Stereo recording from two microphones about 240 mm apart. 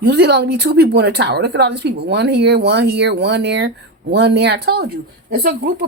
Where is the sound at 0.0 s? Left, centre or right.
Right.